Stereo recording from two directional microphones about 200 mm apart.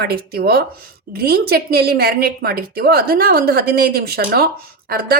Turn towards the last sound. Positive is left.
turn(degrees=-50)  # may be behind; listen again after turning